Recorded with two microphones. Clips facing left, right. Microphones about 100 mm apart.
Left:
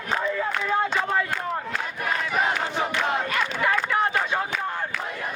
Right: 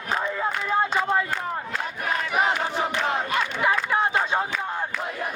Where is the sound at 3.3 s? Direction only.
20° right (ahead or behind).